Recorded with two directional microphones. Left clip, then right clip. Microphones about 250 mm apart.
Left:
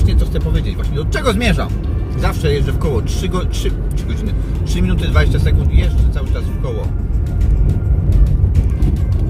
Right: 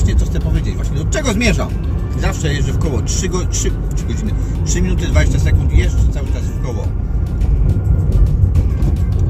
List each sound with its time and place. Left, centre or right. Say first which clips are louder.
1.1 s speech: even; centre
4.7 s speech: even; centre